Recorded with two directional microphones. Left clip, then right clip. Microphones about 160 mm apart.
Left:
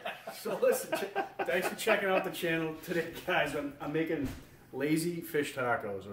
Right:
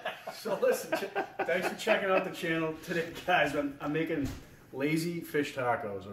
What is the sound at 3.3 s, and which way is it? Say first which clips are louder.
Speech: right 4 dB; 10° left (ahead or behind).